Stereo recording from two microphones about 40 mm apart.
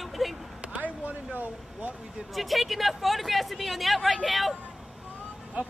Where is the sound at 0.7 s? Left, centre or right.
Right.